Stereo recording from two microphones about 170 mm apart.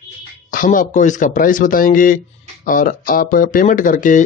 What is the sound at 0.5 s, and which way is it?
A man's voice, 50° left (ahead or behind).